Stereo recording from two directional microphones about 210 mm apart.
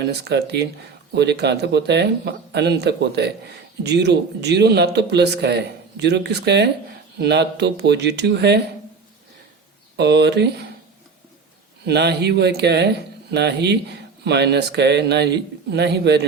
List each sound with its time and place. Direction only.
0.0 s speech: 50° right (ahead or behind)
10.0 s speech: 55° right (ahead or behind)
11.9 s speech: 50° right (ahead or behind)